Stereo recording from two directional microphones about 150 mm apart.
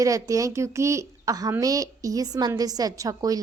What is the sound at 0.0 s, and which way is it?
A woman's voice, 20° right (ahead or behind).